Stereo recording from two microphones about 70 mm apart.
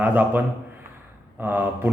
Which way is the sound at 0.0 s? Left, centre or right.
Right.